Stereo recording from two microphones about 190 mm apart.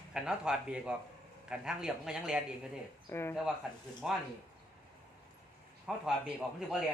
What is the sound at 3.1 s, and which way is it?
Speech, 15° left (ahead or behind).